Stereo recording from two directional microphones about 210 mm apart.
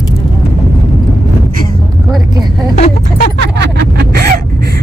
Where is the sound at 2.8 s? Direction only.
35° left (ahead or behind).